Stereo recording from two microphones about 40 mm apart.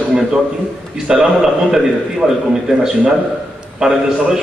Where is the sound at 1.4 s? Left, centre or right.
Centre.